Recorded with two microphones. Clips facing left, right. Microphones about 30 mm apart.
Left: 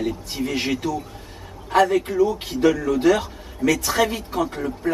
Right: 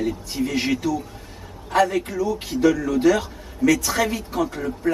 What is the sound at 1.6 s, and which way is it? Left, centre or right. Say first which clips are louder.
A man's voice: left 2 dB; centre.